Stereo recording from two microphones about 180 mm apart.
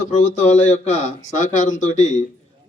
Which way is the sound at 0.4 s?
40° left (ahead or behind).